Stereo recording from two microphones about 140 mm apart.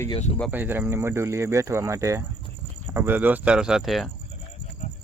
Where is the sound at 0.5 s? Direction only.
15° right (ahead or behind).